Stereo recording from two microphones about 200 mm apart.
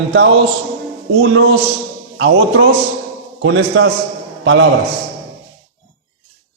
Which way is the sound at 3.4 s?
90° right.